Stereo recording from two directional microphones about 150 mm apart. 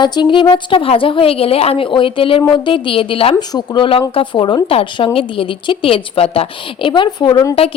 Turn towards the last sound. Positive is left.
turn(degrees=25)  # may be behind; listen again after turning